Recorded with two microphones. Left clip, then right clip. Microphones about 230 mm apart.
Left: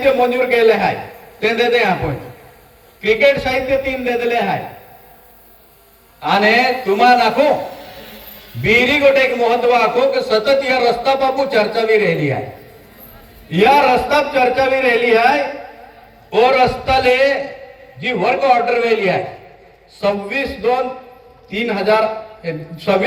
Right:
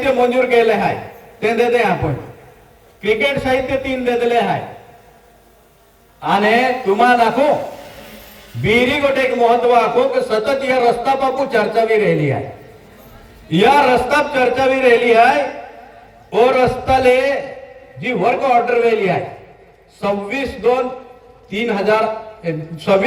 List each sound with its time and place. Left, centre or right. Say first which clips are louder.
0.0 s a man's voice: left 1 dB; right
3.0 s a man's voice: left 3 dB; right
6.2 s a man's voice: left 1 dB; right
7.9 s a sound: left 1 dB; left
8.6 s a man's voice: left 3 dB; right
13.5 s a man's voice: even; right